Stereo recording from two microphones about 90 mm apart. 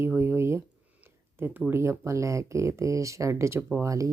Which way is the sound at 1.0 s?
25° right (ahead or behind).